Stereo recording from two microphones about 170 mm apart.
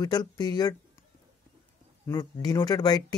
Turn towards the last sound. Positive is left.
turn(degrees=25)  # may be behind; listen again after turning